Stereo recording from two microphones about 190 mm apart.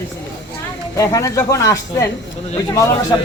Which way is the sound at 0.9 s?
15° left (ahead or behind).